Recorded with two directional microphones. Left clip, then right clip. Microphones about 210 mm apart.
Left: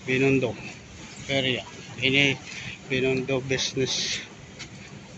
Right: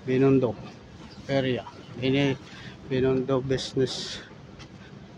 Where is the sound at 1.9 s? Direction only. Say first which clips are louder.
Left 4 dB; 20° right (ahead or behind).